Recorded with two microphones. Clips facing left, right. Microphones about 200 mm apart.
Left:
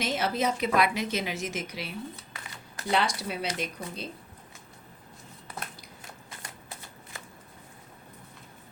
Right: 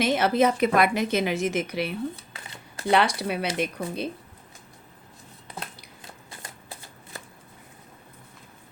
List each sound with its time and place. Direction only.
0.0 s a woman's voice: 60° right (ahead or behind)
2.3 s shuffling cards: 30° right (ahead or behind)
2.9 s a woman's voice: 60° right (ahead or behind)